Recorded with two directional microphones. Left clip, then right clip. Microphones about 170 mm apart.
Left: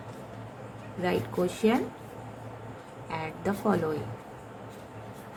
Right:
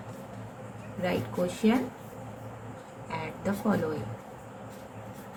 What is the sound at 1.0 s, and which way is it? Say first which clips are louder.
Speech: left 1 dB; 45° left (ahead or behind).